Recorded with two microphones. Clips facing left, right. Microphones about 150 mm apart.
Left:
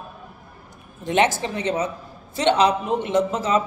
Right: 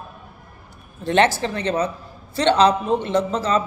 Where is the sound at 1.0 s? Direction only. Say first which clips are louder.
Right 2 dB; 15° left (ahead or behind).